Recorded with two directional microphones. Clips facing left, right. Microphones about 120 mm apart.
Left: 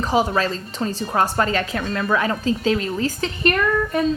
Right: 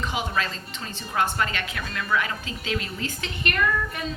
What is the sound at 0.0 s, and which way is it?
A woman's voice, 35° left (ahead or behind).